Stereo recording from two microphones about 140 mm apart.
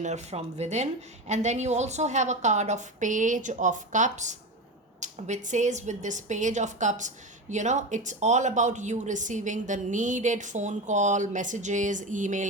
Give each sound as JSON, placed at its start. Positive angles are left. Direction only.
{"t": 0.0, "sound": "speech", "side_deg": -55}